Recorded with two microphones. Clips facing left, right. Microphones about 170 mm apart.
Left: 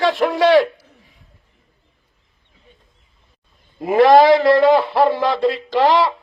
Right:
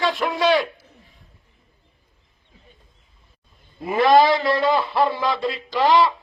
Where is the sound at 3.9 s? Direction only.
70° left (ahead or behind).